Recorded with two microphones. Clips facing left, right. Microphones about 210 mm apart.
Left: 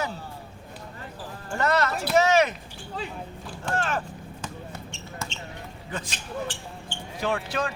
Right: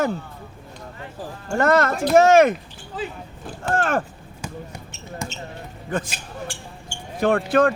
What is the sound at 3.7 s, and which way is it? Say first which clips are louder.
Speech: right 6 dB; 50° right (ahead or behind).